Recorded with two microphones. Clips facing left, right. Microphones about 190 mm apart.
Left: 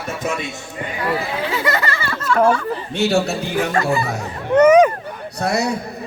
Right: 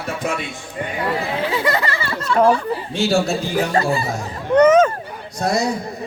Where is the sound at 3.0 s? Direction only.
65° left (ahead or behind).